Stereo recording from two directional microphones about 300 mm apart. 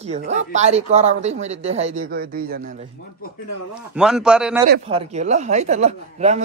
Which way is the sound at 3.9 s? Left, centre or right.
Centre.